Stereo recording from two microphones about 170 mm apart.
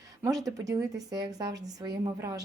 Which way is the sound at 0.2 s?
20° right (ahead or behind).